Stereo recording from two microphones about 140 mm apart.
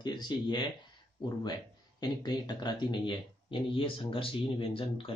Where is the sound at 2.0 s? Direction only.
30° left (ahead or behind).